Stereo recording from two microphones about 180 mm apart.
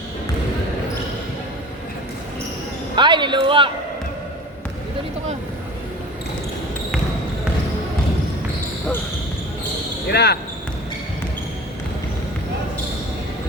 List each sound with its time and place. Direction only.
2.9 s speech: 25° right (ahead or behind)
10.1 s speech: 65° left (ahead or behind)